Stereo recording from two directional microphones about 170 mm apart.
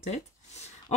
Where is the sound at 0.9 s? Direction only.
40° left (ahead or behind).